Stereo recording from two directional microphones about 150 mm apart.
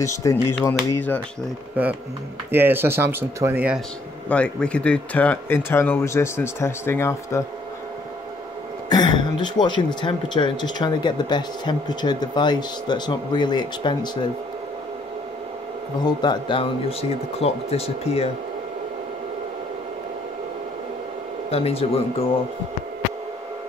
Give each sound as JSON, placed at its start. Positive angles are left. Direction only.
{"t": 0.0, "sound": "speech", "side_deg": 20}
{"t": 1.8, "sound": "speech", "side_deg": -10}
{"t": 4.3, "sound": "speech", "side_deg": 10}
{"t": 8.8, "sound": "a sound", "side_deg": 30}
{"t": 9.4, "sound": "speech", "side_deg": 30}
{"t": 16.2, "sound": "speech", "side_deg": 30}
{"t": 17.4, "sound": "speech", "side_deg": 45}
{"t": 21.5, "sound": "speech", "side_deg": 40}